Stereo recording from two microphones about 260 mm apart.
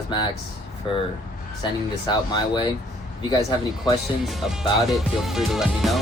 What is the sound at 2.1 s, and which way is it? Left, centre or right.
Speech, centre.